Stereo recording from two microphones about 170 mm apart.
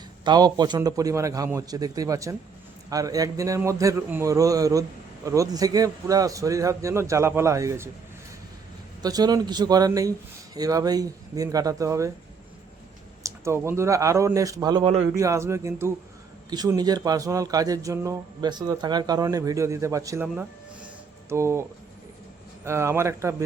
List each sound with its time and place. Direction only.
0.3 s speech: 25° right (ahead or behind)
9.0 s speech: 25° right (ahead or behind)
13.2 s a man's voice: 15° right (ahead or behind)
21.2 s speech: 15° right (ahead or behind)
22.6 s a man's voice: 15° right (ahead or behind)